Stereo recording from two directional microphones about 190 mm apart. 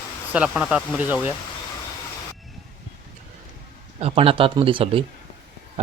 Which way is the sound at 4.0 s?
30° right (ahead or behind).